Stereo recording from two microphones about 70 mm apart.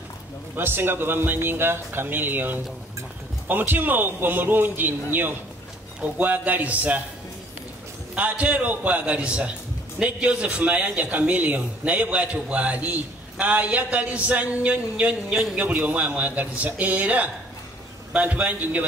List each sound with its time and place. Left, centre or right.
0.6 s a man's voice: right
8.2 s a man's voice: right